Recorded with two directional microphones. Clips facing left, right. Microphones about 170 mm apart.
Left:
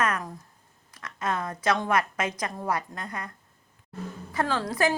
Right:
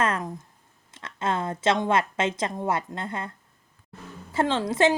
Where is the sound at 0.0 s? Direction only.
25° right (ahead or behind).